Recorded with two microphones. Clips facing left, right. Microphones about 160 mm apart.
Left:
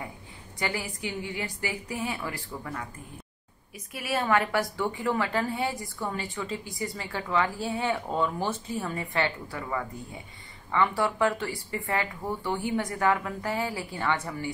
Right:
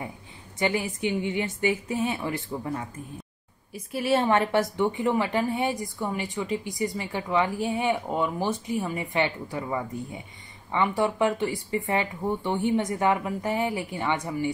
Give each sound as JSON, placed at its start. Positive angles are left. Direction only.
{"t": 0.6, "sound": "a woman's voice", "side_deg": -20}